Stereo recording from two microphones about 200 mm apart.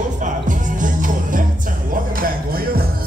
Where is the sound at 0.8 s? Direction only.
40° right (ahead or behind).